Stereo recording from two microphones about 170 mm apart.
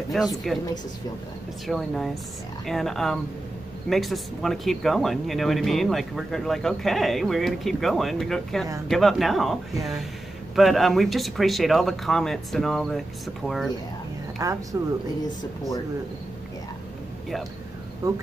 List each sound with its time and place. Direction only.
0.1 s speech: centre (ahead or behind)
1.7 s speech: centre (ahead or behind)
14.4 s speech: 20° right (ahead or behind)